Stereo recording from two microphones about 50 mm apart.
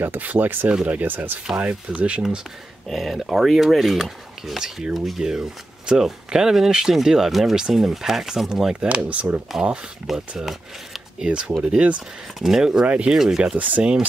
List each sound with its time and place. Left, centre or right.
0.2 s speech: right
1.6 s speech: right
2.9 s speech: centre
3.2 s speech: centre
5.2 s speech: centre
8.8 s speech: right
9.5 s speech: centre
11.1 s speech: right
12.4 s speech: centre
12.8 s speech: right
13.1 s speech: centre
13.6 s speech: right